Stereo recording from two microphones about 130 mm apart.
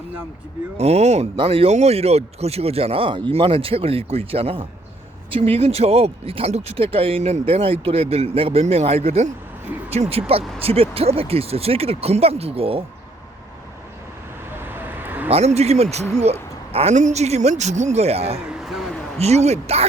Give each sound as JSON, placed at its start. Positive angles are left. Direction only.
{"t": 0.8, "sound": "a woman's voice", "side_deg": -55}
{"t": 14.6, "sound": "vehicle", "side_deg": -15}
{"t": 15.3, "sound": "a woman's voice", "side_deg": -55}
{"t": 18.4, "sound": "a sound", "side_deg": -5}
{"t": 19.2, "sound": "a woman's voice", "side_deg": -55}